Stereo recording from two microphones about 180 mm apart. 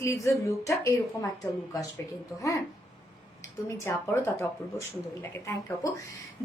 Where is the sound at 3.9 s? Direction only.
15° left (ahead or behind).